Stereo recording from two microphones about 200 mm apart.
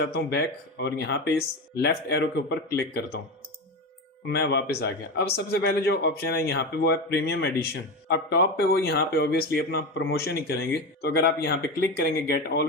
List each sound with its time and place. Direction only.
0.0 s speech: 55° left (ahead or behind)
4.3 s speech: 55° left (ahead or behind)